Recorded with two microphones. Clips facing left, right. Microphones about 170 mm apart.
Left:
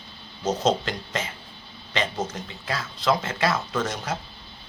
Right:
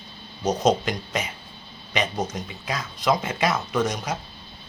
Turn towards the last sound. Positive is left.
turn(degrees=-15)  # may be behind; listen again after turning